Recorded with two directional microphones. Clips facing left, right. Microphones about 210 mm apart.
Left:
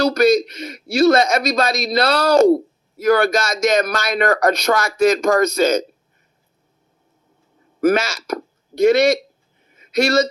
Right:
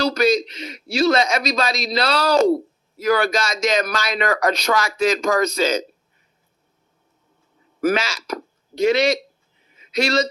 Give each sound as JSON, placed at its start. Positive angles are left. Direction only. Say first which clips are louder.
{"t": 0.0, "sound": "speech", "louder": "left 4 dB", "side_deg": 45}
{"t": 7.8, "sound": "speech", "louder": "left 4 dB", "side_deg": 45}
{"t": 9.6, "sound": "a sound", "louder": "left 4 dB", "side_deg": 50}